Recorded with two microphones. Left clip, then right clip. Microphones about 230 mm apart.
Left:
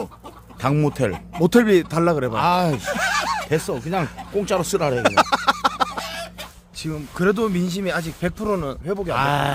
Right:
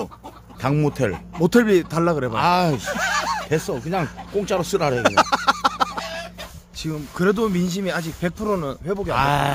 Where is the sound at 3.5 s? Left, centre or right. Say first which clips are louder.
Even; centre.